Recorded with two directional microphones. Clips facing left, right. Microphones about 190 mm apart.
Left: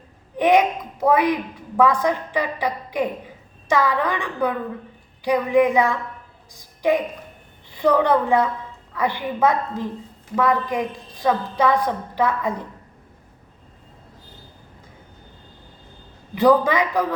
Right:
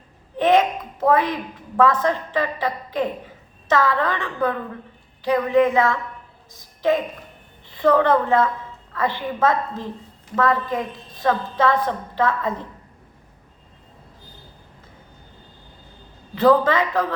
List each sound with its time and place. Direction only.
0.3 s a woman's voice: 15° left (ahead or behind)
16.3 s a woman's voice: 15° left (ahead or behind)